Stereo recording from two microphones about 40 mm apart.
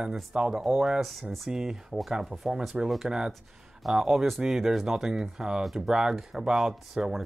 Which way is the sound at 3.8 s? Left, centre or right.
Centre.